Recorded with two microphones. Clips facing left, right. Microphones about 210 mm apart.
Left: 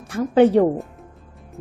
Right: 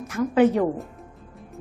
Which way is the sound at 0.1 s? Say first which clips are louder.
Left 4 dB; 30° left (ahead or behind).